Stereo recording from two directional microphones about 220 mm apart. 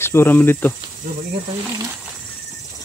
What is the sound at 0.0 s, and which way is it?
Speech, 10° left (ahead or behind).